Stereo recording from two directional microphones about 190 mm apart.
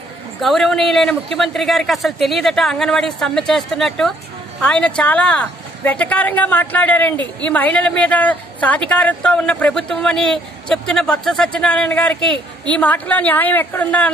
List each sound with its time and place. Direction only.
0.4 s a woman's voice: centre (ahead or behind)